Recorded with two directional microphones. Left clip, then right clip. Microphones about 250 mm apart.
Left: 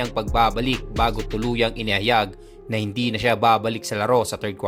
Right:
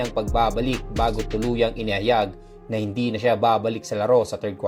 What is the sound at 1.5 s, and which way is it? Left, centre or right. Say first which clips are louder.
Speech: left 2 dB; centre.